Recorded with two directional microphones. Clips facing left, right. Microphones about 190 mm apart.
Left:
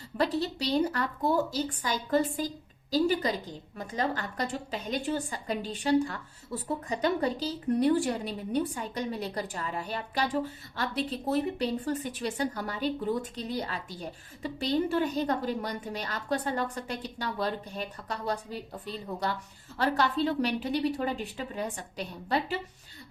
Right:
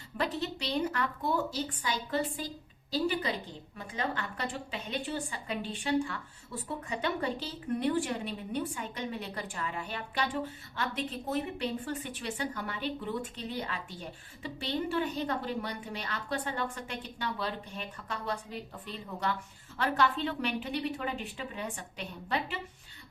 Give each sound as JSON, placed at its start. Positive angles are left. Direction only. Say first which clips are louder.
{"t": 0.2, "sound": "a woman's voice", "louder": "left 5 dB", "side_deg": 35}